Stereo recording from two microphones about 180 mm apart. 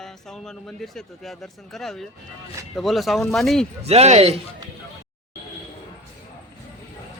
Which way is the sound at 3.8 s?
35° right (ahead or behind).